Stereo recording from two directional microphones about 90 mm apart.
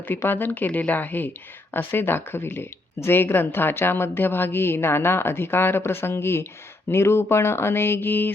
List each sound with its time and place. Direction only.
0.1 s speech: 25° left (ahead or behind)